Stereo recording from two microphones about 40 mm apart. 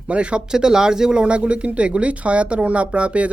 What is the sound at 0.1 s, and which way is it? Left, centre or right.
Speech, right.